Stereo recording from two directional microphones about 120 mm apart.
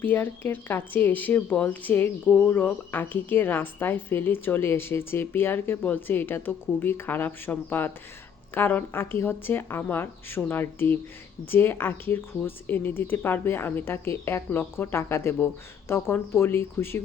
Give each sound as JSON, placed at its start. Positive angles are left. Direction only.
{"t": 0.0, "sound": "a woman's voice", "side_deg": 15}